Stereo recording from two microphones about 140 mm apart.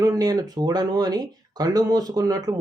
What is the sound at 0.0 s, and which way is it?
Speech, 25° right (ahead or behind).